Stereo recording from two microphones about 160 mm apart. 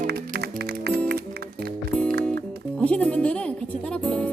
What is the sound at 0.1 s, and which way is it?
Music, 85° right.